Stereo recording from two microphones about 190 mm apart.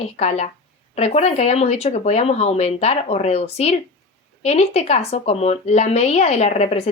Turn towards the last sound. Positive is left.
turn(degrees=35)  # may be behind; listen again after turning